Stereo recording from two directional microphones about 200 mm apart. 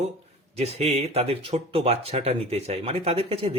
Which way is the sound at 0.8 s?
30° right (ahead or behind).